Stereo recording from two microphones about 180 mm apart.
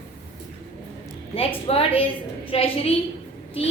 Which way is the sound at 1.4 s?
30° left (ahead or behind).